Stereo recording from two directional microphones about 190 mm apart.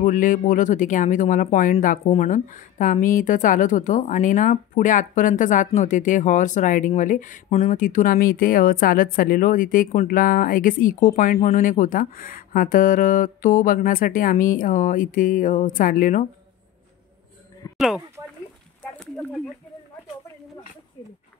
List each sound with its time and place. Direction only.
0.0 s speech: 45° left (ahead or behind)
17.7 s speech: centre (ahead or behind)
18.9 s a sound: 5° left (ahead or behind)